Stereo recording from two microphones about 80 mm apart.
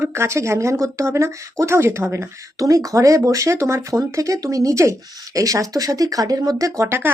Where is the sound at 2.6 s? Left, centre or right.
Right.